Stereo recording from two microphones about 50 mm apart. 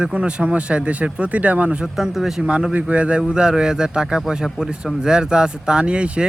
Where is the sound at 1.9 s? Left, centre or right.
Centre.